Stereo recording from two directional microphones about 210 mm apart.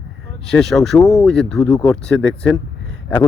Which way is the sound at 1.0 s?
15° left (ahead or behind).